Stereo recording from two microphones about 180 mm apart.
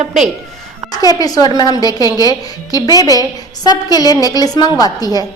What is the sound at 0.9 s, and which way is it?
A woman's voice, 20° left (ahead or behind).